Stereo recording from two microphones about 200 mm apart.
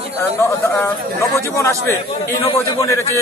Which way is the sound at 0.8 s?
15° left (ahead or behind).